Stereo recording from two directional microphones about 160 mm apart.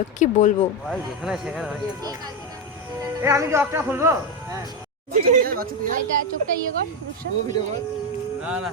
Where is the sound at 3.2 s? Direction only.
20° right (ahead or behind).